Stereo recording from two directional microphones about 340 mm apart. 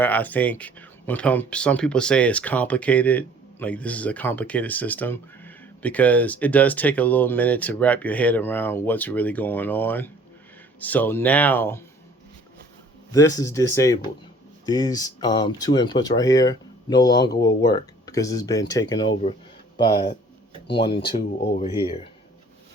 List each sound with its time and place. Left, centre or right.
0.0 s speech: centre
13.1 s speech: centre